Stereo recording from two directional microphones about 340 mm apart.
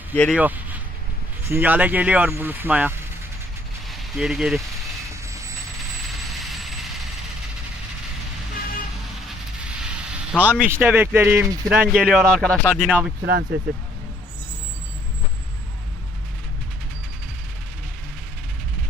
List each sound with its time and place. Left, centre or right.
0.1 s speech: centre
5.2 s vehicle: centre
10.1 s speech: centre
13.2 s speech: right